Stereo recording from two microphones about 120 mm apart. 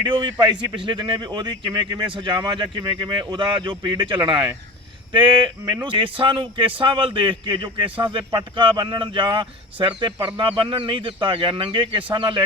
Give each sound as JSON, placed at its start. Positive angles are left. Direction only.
{"t": 0.0, "sound": "a man's voice", "side_deg": -40}